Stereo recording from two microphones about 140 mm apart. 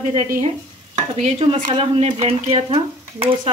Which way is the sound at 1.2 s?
40° right (ahead or behind).